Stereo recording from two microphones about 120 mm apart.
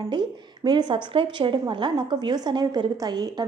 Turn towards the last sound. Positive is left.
turn(degrees=-35)  # may be behind; listen again after turning